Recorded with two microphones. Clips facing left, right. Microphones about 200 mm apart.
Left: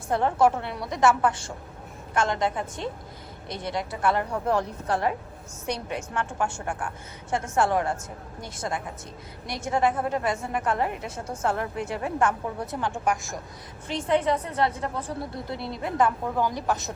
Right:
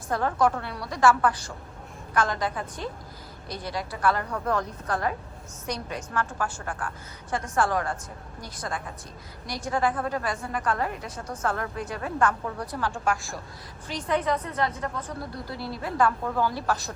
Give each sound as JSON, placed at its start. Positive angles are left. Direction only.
{"t": 0.1, "sound": "a woman's voice", "side_deg": 25}
{"t": 6.7, "sound": "a woman's voice", "side_deg": 15}
{"t": 7.3, "sound": "a woman's voice", "side_deg": 25}